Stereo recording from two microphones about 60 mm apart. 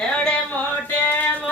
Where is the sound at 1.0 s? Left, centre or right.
Left.